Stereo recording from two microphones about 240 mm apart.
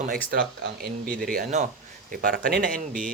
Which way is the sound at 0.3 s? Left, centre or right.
Right.